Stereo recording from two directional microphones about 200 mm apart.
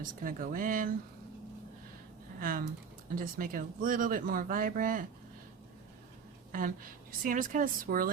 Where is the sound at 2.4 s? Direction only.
45° right (ahead or behind).